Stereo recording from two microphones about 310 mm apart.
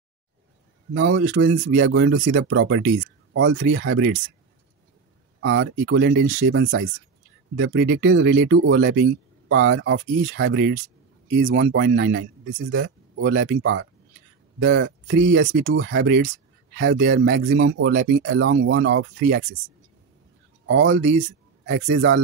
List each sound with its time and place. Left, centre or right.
0.9 s speech: right
1.5 s speech: right
1.9 s speech: right
5.4 s speech: right
20.6 s speech: right